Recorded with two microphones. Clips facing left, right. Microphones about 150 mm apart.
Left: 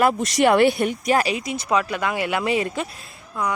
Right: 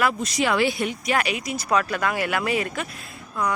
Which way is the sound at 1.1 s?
30° left (ahead or behind).